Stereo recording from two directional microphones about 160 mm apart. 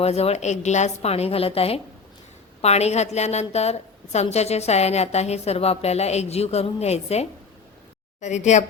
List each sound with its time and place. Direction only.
0.0 s a woman's voice: 40° left (ahead or behind)